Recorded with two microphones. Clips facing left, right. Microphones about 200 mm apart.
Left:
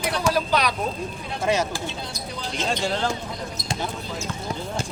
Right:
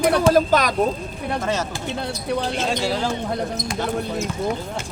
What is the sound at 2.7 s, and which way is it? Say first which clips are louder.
Speech: left 1 dB; 5° right (ahead or behind).